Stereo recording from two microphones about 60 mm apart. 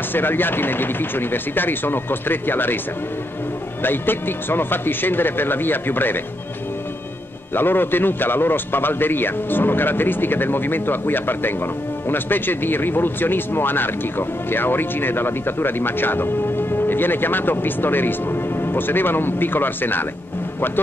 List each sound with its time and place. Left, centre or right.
0.1 s a man's voice: left
3.8 s a man's voice: left
7.5 s a man's voice: left